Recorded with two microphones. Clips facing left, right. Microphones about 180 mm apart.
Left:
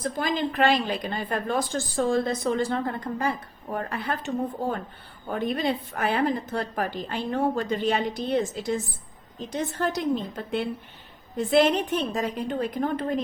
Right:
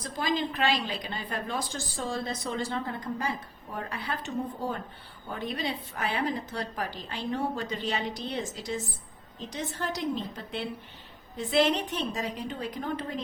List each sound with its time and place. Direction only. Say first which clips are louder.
0.0 s a woman's voice: left 3 dB; 55° left (ahead or behind)
5.3 s a woman's voice: left 7 dB; 55° left (ahead or behind)